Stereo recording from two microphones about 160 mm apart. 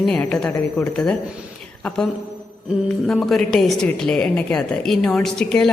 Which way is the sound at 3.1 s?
Centre (ahead or behind).